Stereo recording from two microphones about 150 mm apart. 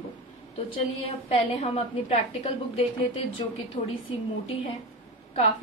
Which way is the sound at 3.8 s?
35° left (ahead or behind).